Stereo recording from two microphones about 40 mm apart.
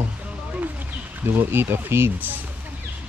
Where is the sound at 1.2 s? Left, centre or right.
Right.